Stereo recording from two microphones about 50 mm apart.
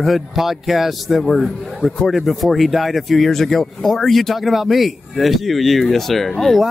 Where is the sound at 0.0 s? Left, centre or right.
Centre.